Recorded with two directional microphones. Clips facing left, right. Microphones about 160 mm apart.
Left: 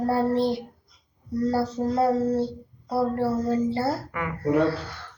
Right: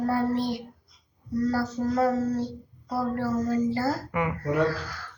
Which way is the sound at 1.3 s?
30° left (ahead or behind).